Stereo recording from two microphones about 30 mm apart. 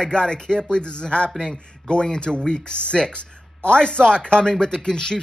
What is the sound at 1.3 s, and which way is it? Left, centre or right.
Speech, centre.